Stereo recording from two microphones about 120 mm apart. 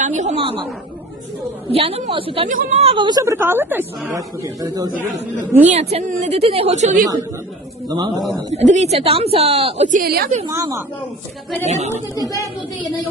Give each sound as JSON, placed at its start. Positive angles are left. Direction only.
{"t": 0.0, "sound": "speech", "side_deg": -85}
{"t": 1.7, "sound": "a woman's voice", "side_deg": -50}
{"t": 2.5, "sound": "a woman's voice", "side_deg": -70}
{"t": 2.9, "sound": "a man's voice", "side_deg": -40}
{"t": 3.2, "sound": "a woman's voice", "side_deg": -20}
{"t": 4.6, "sound": "a man's voice", "side_deg": -30}
{"t": 5.6, "sound": "a woman's voice", "side_deg": -60}
{"t": 7.9, "sound": "a man's voice", "side_deg": -35}
{"t": 8.5, "sound": "speech", "side_deg": -70}
{"t": 10.5, "sound": "a woman's voice", "side_deg": -25}
{"t": 11.6, "sound": "a woman's voice", "side_deg": -70}